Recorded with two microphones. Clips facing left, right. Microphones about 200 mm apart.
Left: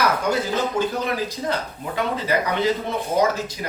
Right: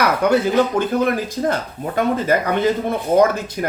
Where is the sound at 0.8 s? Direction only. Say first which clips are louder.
Right 5 dB; 50° right (ahead or behind).